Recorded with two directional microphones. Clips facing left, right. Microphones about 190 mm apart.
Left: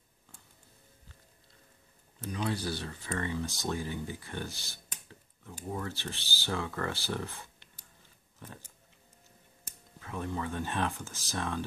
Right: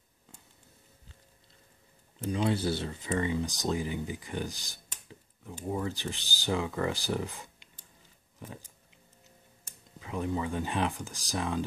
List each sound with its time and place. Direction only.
2.1 s speech: 25° right (ahead or behind)
9.9 s speech: 15° right (ahead or behind)